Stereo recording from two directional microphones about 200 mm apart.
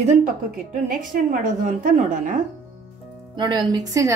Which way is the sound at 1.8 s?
40° right (ahead or behind).